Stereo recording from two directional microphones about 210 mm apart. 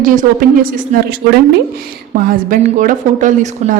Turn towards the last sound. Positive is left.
turn(degrees=-35)  # may be behind; listen again after turning